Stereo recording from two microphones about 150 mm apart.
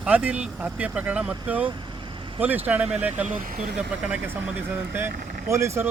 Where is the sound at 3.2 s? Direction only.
65° right (ahead or behind).